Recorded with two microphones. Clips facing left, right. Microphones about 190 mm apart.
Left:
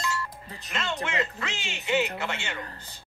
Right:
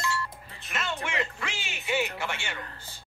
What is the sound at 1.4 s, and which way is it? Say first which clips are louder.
Speech: left 2 dB; 10° right (ahead or behind).